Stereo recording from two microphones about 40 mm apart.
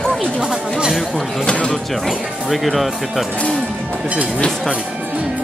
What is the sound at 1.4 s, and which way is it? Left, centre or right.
Speech, left.